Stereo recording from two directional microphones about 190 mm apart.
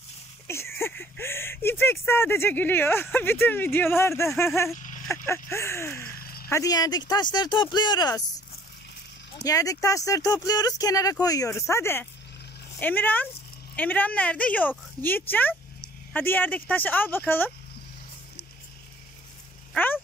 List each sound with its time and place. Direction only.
0.5 s speech: 15° left (ahead or behind)
6.1 s a sound: 50° left (ahead or behind)
6.5 s speech: 20° left (ahead or behind)
9.4 s speech: 20° left (ahead or behind)
19.7 s speech: 10° left (ahead or behind)